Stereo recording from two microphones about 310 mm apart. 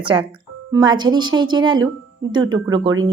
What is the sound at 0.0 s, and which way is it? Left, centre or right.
Speech, centre.